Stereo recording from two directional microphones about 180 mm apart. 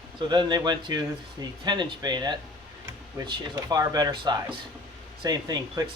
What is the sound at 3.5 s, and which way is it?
Speech, 20° right (ahead or behind).